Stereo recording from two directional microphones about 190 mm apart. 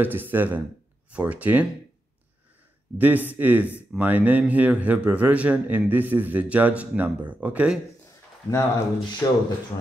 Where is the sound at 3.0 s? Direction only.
10° right (ahead or behind).